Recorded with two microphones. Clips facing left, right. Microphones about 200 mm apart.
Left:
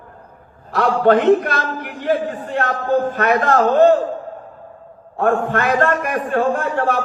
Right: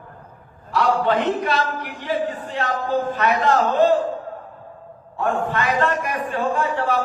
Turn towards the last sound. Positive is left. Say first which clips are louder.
# left 2 dB
turn(degrees=50)  # may be behind; listen again after turning